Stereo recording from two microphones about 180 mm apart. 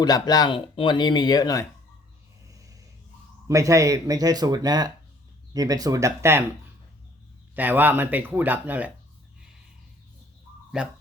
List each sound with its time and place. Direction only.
0.0 s speech: 20° left (ahead or behind)
3.5 s speech: 15° right (ahead or behind)
7.5 s speech: 10° right (ahead or behind)
10.7 s speech: 5° right (ahead or behind)